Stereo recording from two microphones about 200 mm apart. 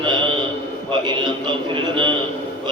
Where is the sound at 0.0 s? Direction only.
25° right (ahead or behind).